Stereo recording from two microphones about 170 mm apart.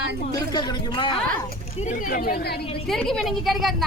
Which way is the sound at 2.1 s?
55° left (ahead or behind).